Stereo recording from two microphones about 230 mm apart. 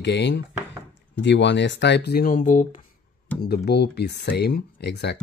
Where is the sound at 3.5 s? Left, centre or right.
Left.